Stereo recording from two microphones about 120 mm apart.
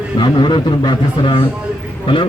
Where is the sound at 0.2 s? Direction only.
40° left (ahead or behind).